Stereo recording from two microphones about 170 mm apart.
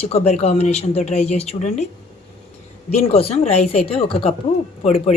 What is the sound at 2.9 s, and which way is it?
Speech, 35° left (ahead or behind).